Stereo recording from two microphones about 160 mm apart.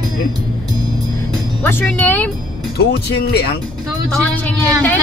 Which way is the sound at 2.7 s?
85° left.